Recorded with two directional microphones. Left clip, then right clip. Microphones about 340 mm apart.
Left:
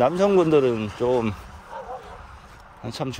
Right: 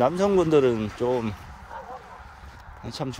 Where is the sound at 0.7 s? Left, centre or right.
Left.